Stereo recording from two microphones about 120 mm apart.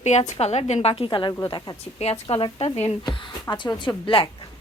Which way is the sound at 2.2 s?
50° left (ahead or behind).